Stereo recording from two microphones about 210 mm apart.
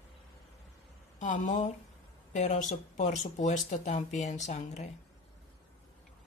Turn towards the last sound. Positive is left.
turn(degrees=35)  # may be behind; listen again after turning